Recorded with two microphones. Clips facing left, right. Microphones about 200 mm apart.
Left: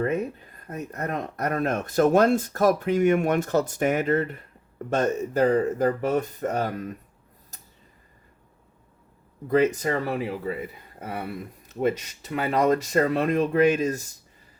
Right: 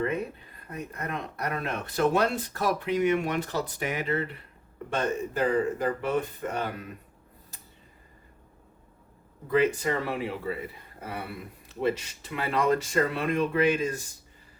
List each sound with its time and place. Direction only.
0.7 s speech: 45° left (ahead or behind)
9.5 s speech: 40° left (ahead or behind)
11.8 s speech: 40° left (ahead or behind)